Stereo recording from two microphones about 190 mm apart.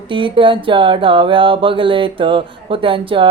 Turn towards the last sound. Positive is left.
turn(degrees=-25)  # may be behind; listen again after turning